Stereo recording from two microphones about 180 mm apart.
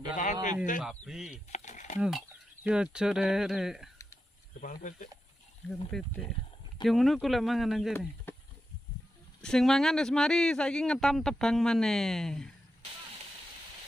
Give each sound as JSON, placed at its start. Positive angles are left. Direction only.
{"t": 0.1, "sound": "speech", "side_deg": 45}
{"t": 0.8, "sound": "speech", "side_deg": 0}
{"t": 1.5, "sound": "a sound", "side_deg": 40}
{"t": 2.0, "sound": "speech", "side_deg": 0}
{"t": 4.6, "sound": "speech", "side_deg": 45}
{"t": 5.9, "sound": "speech", "side_deg": 5}
{"t": 8.3, "sound": "a sound", "side_deg": 10}
{"t": 9.4, "sound": "speech", "side_deg": 5}